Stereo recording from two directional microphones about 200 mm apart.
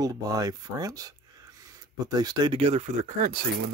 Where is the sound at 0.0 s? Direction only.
20° right (ahead or behind).